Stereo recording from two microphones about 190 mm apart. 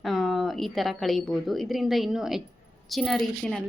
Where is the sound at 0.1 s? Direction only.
Centre (ahead or behind).